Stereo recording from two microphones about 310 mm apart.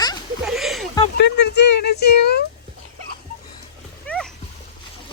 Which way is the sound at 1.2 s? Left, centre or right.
Left.